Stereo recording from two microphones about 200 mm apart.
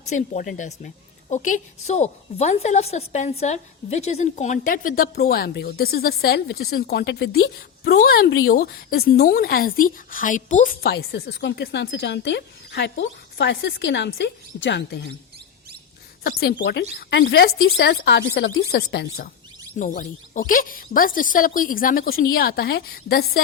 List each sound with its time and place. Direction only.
0.0 s a woman's voice: 40° left (ahead or behind)
10.9 s speech: 55° left (ahead or behind)
16.2 s a woman's voice: 50° left (ahead or behind)
19.8 s a woman's voice: 40° left (ahead or behind)